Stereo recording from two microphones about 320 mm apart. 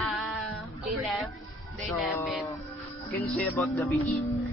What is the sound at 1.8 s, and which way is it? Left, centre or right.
Music, centre.